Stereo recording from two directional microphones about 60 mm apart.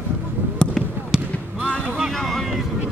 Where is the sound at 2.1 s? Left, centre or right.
Centre.